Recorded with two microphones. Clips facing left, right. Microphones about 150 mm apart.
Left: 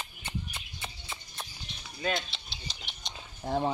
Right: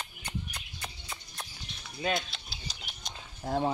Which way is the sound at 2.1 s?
Centre (ahead or behind).